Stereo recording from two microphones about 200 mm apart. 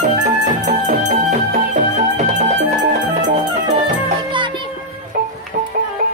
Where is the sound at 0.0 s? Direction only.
40° right (ahead or behind).